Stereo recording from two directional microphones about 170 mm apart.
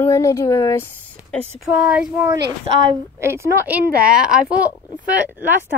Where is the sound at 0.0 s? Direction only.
15° left (ahead or behind).